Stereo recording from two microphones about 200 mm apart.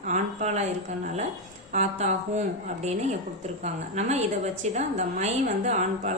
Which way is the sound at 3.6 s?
35° right (ahead or behind).